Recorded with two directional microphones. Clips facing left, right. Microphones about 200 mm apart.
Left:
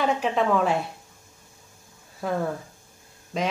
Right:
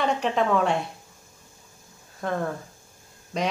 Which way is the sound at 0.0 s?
Centre (ahead or behind).